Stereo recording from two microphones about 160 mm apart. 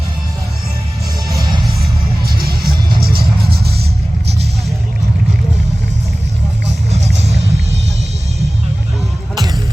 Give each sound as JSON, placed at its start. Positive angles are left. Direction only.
{"t": 1.3, "sound": "music", "side_deg": -25}
{"t": 2.2, "sound": "music", "side_deg": -75}
{"t": 7.2, "sound": "vehicle", "side_deg": -40}
{"t": 9.3, "sound": "music", "side_deg": -25}